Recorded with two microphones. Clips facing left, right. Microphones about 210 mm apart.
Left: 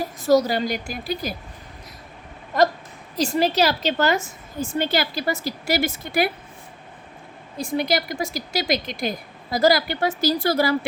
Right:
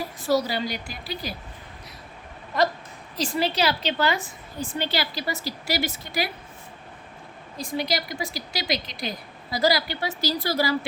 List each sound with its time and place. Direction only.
0.0 s a woman's voice: 45° left (ahead or behind)
3.2 s a woman's voice: 45° left (ahead or behind)
7.6 s a woman's voice: 50° left (ahead or behind)